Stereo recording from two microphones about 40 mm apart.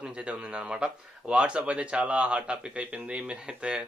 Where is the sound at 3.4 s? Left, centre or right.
Centre.